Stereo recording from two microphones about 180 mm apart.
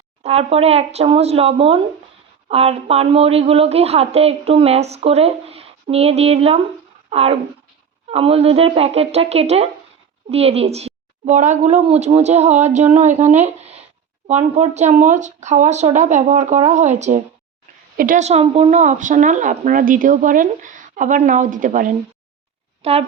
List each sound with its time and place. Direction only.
0.2 s a woman's voice: 35° right (ahead or behind)
17.9 s speech: 50° right (ahead or behind)
22.8 s speech: 35° right (ahead or behind)